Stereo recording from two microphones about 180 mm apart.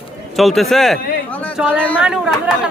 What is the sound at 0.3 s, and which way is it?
Speech, centre (ahead or behind).